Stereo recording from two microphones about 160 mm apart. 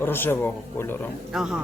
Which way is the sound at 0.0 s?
15° left (ahead or behind).